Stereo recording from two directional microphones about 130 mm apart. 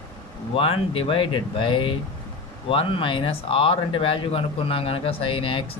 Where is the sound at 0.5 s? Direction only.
45° left (ahead or behind).